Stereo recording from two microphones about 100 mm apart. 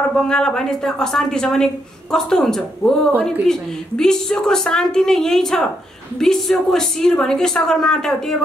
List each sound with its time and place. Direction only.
0.2 s speech: 5° left (ahead or behind)